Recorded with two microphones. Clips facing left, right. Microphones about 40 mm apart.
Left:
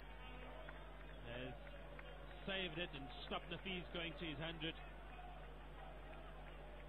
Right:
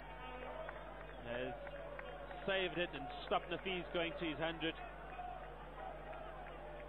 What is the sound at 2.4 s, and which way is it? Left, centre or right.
A man's voice, centre.